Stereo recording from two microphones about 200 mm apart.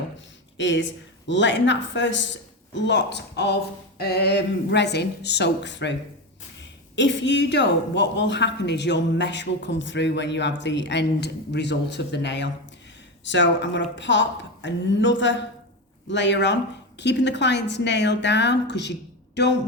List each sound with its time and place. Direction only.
0.5 s a woman's voice: 65° left (ahead or behind)